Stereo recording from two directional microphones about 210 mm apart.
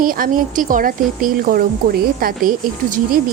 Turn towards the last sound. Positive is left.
turn(degrees=-40)  # may be behind; listen again after turning